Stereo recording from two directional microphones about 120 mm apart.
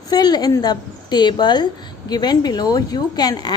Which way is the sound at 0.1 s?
35° left (ahead or behind).